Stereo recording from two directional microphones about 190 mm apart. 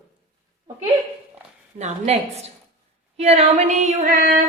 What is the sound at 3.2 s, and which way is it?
A woman's voice, 35° right (ahead or behind).